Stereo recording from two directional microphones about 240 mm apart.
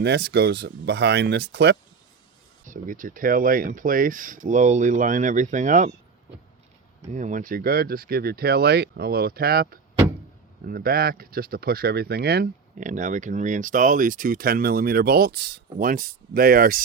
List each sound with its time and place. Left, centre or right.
0.0 s speech: right
2.6 s speech: right
7.1 s speech: right